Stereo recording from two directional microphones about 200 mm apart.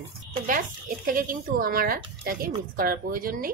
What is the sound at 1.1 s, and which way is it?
A woman's voice, 45° right (ahead or behind).